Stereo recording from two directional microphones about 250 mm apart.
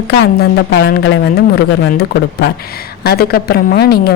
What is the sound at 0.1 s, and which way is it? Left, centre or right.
Speech, left.